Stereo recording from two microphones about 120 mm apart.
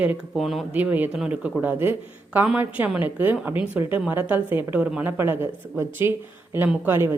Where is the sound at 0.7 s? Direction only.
15° right (ahead or behind).